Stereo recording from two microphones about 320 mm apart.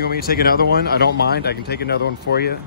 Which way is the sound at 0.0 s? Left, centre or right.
Left.